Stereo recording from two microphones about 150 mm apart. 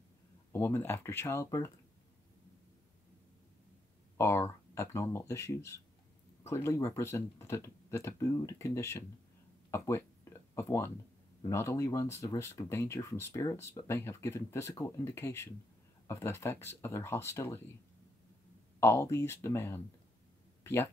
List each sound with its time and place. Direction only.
0.5 s speech: 15° left (ahead or behind)
4.2 s speech: 15° left (ahead or behind)
9.7 s a sound: 15° left (ahead or behind)
11.4 s speech: 20° left (ahead or behind)
18.8 s speech: 20° left (ahead or behind)